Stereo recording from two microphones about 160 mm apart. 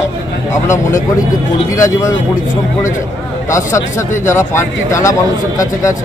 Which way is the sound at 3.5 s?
20° left (ahead or behind).